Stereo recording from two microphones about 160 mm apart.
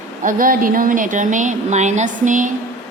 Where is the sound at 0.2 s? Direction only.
60° right (ahead or behind).